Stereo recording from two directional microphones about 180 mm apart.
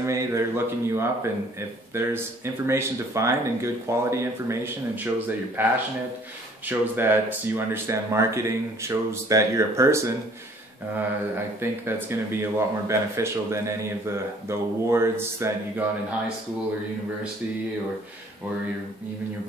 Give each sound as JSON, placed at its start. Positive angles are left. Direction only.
{"t": 0.0, "sound": "speech", "side_deg": -15}